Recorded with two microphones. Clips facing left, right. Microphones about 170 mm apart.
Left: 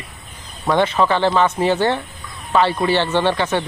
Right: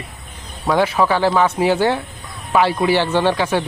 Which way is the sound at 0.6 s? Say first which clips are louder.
Even; 5° right (ahead or behind).